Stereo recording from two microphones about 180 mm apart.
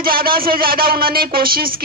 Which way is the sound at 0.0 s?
55° right (ahead or behind).